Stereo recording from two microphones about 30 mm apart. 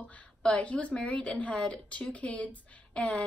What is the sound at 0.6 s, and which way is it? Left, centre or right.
Speech, left.